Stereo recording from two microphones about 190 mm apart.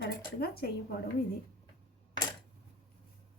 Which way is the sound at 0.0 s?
55° left (ahead or behind).